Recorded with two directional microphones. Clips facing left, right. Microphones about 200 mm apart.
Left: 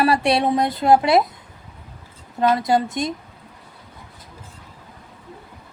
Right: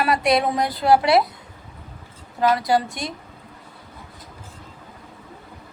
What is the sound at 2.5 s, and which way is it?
Speech, 25° left (ahead or behind).